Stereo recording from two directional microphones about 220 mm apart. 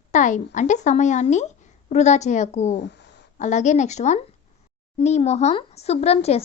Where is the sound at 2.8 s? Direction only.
50° left (ahead or behind).